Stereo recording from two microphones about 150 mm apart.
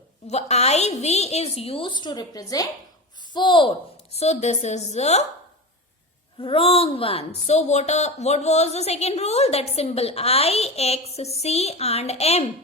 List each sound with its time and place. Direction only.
0.3 s a woman's voice: 45° left (ahead or behind)
6.4 s a woman's voice: 35° left (ahead or behind)